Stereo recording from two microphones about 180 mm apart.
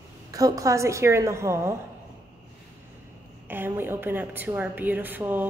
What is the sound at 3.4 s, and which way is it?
A woman's voice, 10° right (ahead or behind).